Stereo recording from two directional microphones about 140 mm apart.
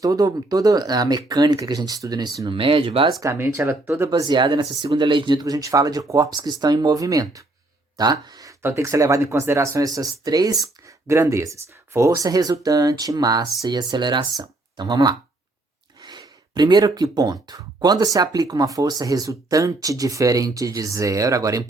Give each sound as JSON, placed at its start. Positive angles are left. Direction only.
{"t": 0.0, "sound": "speech", "side_deg": -25}
{"t": 3.2, "sound": "speech", "side_deg": -20}
{"t": 4.1, "sound": "speech", "side_deg": -30}